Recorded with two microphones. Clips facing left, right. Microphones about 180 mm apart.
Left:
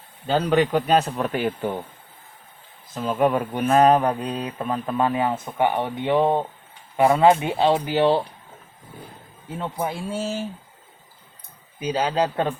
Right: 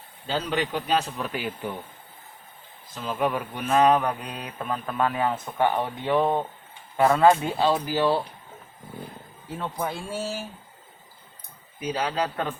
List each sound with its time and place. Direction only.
0.3 s speech: 50° left (ahead or behind)
2.9 s mantra: 50° left (ahead or behind); by 8.2 s 20° left (ahead or behind)
9.6 s speech: 15° left (ahead or behind)
10.2 s mantra: 20° left (ahead or behind)
11.8 s mantra: 30° left (ahead or behind)